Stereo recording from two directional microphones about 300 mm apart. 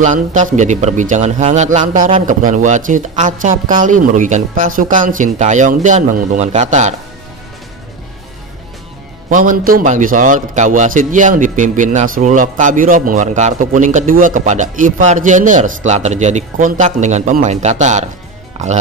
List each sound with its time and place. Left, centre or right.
0.0 s a man's voice: right
9.3 s a man's voice: right